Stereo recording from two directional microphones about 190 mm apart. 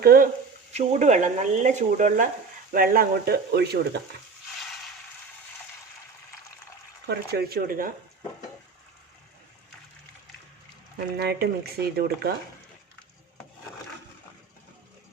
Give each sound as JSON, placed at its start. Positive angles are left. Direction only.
{"t": 0.0, "sound": "speech", "side_deg": -50}
{"t": 0.7, "sound": "speech", "side_deg": -40}
{"t": 7.1, "sound": "speech", "side_deg": -55}
{"t": 11.2, "sound": "speech", "side_deg": -55}